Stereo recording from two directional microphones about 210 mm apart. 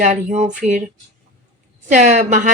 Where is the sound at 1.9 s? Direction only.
35° right (ahead or behind).